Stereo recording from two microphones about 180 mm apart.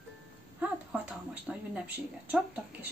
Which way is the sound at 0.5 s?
5° right (ahead or behind).